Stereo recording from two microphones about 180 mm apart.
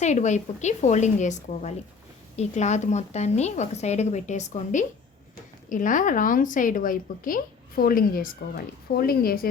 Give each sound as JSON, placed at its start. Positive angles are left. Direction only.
{"t": 0.0, "sound": "a woman's voice", "side_deg": 40}